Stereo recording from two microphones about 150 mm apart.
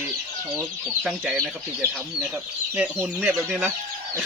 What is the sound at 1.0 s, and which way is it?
Speech, 5° right (ahead or behind).